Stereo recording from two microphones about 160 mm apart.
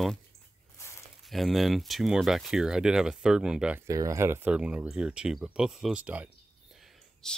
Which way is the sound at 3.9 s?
20° right (ahead or behind).